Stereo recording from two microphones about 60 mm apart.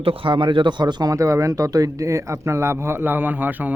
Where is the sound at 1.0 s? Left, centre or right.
Right.